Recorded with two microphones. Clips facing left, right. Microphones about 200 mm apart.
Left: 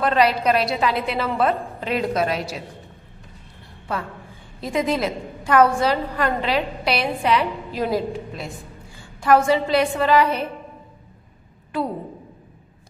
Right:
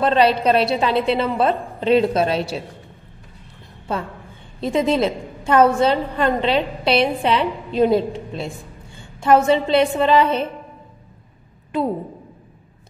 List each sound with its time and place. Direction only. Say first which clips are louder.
0.0 s a woman's voice: right 3 dB; 25° right (ahead or behind)
3.9 s a woman's voice: right 3 dB; 25° right (ahead or behind)